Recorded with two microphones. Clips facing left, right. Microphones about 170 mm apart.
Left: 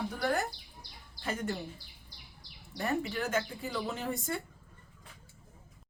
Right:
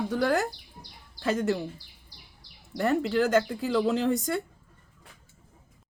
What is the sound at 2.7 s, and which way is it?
Speech, 80° right.